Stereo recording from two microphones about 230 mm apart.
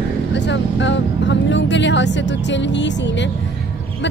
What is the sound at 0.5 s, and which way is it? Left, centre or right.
Speech, left.